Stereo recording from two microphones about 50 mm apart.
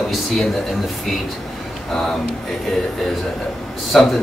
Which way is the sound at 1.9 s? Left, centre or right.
Centre.